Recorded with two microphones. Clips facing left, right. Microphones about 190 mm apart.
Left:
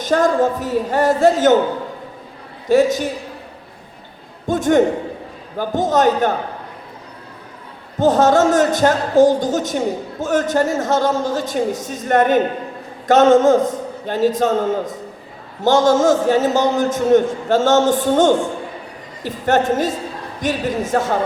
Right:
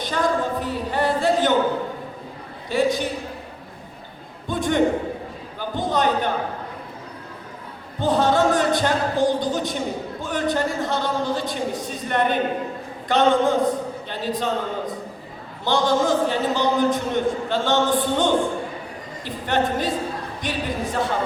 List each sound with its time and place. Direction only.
0.0 s a man's voice: 45° left (ahead or behind)
2.6 s a man's voice: 45° left (ahead or behind)
4.4 s a sound: 45° left (ahead or behind)
5.5 s a man's voice: 45° left (ahead or behind)
7.9 s a man's voice: 45° left (ahead or behind)